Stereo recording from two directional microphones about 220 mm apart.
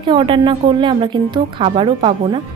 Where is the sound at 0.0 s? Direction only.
20° right (ahead or behind).